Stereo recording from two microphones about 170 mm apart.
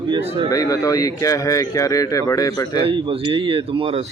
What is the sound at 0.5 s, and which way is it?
Speech, 20° left (ahead or behind).